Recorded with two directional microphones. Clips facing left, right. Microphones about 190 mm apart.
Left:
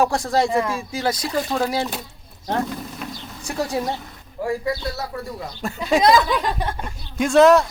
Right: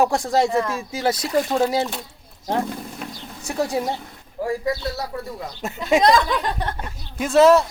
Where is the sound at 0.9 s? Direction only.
25° right (ahead or behind).